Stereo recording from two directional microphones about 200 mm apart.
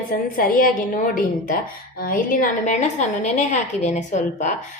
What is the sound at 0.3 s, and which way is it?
A woman's voice, 45° left (ahead or behind).